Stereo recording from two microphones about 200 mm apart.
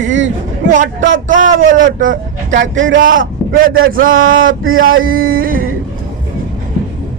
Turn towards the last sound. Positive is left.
turn(degrees=-45)  # may be behind; listen again after turning